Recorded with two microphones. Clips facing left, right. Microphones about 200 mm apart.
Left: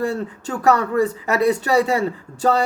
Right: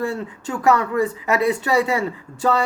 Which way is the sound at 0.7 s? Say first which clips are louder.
Left 1 dB; 35° left (ahead or behind).